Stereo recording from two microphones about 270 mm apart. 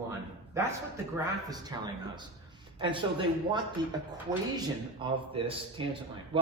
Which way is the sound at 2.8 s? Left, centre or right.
Centre.